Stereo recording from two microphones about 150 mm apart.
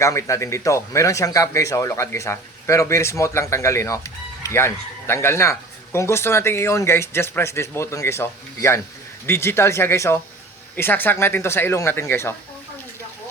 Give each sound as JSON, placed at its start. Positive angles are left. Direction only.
{"t": 0.0, "sound": "speech", "side_deg": 20}